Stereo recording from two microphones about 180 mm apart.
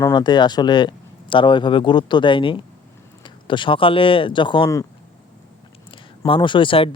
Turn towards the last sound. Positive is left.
turn(degrees=30)  # may be behind; listen again after turning